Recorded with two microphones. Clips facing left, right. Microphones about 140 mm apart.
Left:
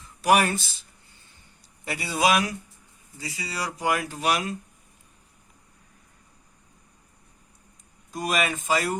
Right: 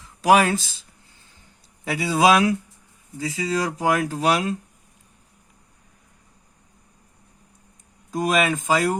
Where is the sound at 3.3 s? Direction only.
90° right.